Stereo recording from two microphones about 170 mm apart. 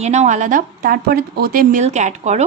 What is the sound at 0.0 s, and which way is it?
A woman's voice, 40° right (ahead or behind).